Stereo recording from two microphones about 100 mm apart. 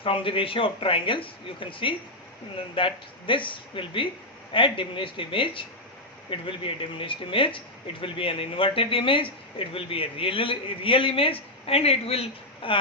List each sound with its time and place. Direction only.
0.0 s speech: 60° left (ahead or behind)